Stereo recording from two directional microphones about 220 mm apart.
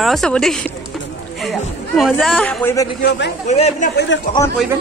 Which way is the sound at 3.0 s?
50° left (ahead or behind).